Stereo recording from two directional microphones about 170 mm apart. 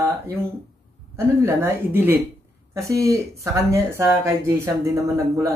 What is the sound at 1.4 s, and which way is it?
Speech, 15° right (ahead or behind).